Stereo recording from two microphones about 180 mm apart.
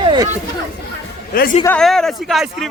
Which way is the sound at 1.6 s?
5° left (ahead or behind).